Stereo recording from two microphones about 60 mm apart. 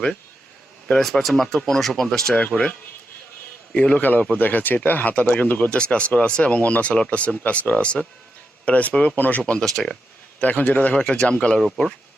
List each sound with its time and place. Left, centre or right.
1.0 s speech: centre
2.3 s speech: centre
3.8 s speech: left
9.4 s speech: centre
10.4 s speech: left; by 11.9 s centre